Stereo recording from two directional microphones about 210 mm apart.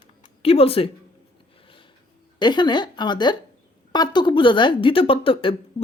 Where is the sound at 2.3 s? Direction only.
20° left (ahead or behind).